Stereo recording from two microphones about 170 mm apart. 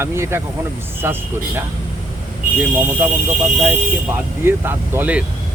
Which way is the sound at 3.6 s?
10° right (ahead or behind).